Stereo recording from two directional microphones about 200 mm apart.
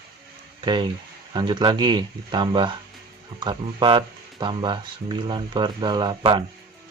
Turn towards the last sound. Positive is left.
turn(degrees=-25)  # may be behind; listen again after turning